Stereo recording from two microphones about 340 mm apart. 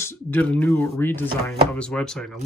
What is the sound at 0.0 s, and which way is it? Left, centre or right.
Speech, centre.